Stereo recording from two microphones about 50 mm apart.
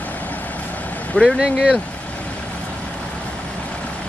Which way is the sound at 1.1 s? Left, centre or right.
Left.